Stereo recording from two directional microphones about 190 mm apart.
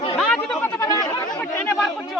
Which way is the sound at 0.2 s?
Centre (ahead or behind).